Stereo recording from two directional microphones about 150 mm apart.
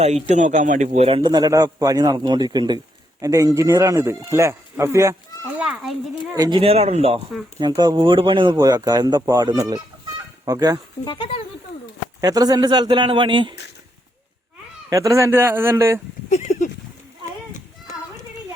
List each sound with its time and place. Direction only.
0.3 s a man's voice: 50° right (ahead or behind); by 5.1 s 20° right (ahead or behind)
5.5 s a child's voice: 5° right (ahead or behind)
6.3 s a man's voice: 25° right (ahead or behind)
6.6 s speech: 40° right (ahead or behind)
7.8 s a man's voice: 25° right (ahead or behind)
11.0 s speech: 30° left (ahead or behind)
12.2 s a man's voice: 25° right (ahead or behind)
14.8 s speech: 20° right (ahead or behind)
16.3 s a sound: 55° left (ahead or behind)